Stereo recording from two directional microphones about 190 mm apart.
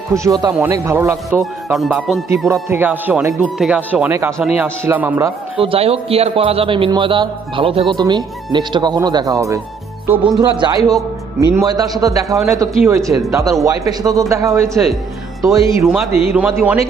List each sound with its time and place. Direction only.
0.1 s a man's voice: 20° right (ahead or behind)
1.7 s speech: 5° right (ahead or behind)
2.5 s speech: 10° right (ahead or behind)
5.5 s a man's voice: 30° right (ahead or behind)
15.6 s speech: centre (ahead or behind)